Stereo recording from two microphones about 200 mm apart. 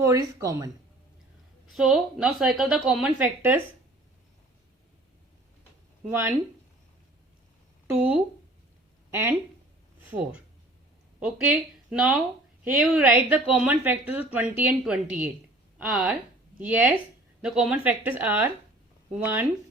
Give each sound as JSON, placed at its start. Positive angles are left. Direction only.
{"t": 0.0, "sound": "a woman's voice", "side_deg": -15}
{"t": 1.7, "sound": "a woman's voice", "side_deg": 0}
{"t": 6.1, "sound": "a woman's voice", "side_deg": -10}
{"t": 7.9, "sound": "a woman's voice", "side_deg": -5}
{"t": 9.0, "sound": "a sound", "side_deg": -10}
{"t": 10.1, "sound": "a woman's voice", "side_deg": -5}